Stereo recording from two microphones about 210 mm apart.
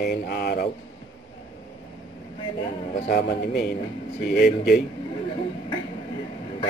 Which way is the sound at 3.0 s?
50° left (ahead or behind).